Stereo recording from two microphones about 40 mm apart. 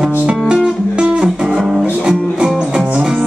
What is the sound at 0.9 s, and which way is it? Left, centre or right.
Music, right.